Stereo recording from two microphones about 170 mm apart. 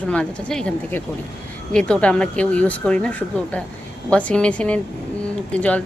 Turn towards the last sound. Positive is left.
turn(degrees=10)  # may be behind; listen again after turning